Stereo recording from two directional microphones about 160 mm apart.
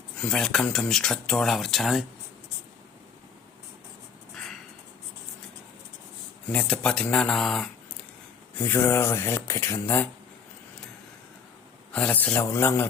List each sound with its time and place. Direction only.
0.2 s speech: 5° left (ahead or behind)
6.5 s speech: 10° left (ahead or behind)
8.5 s speech: 15° left (ahead or behind)
11.9 s speech: 10° left (ahead or behind)